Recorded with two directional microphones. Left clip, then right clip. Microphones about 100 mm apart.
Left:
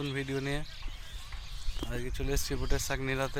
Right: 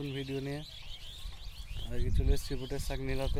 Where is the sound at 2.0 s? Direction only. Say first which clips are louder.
Left 3 dB; 15° right (ahead or behind).